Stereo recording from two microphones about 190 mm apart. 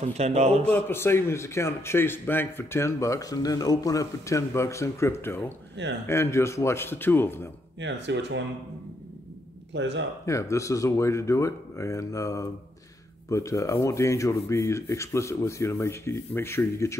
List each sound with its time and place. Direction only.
0.0 s a man's voice: 35° right (ahead or behind)
0.7 s a man's voice: 10° left (ahead or behind)
7.8 s speech: 70° right (ahead or behind)
9.8 s speech: 70° right (ahead or behind)
10.2 s a man's voice: 15° left (ahead or behind)